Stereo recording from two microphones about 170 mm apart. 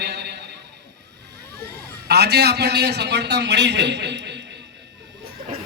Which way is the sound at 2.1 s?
75° right (ahead or behind).